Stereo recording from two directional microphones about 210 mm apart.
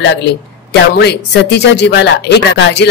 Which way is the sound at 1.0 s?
55° left (ahead or behind).